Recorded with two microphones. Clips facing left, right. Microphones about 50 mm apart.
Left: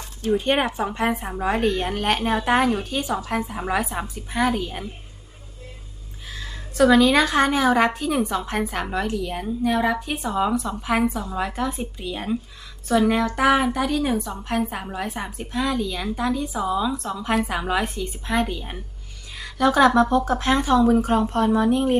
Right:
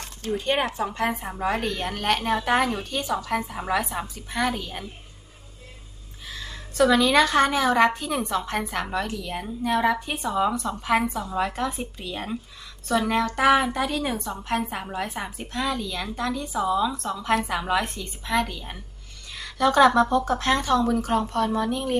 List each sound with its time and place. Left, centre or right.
0.3 s speech: left
1.1 s a woman's voice: centre
6.3 s a sound: centre
6.8 s a woman's voice: centre